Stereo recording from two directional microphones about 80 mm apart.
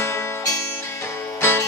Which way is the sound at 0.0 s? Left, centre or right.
Left.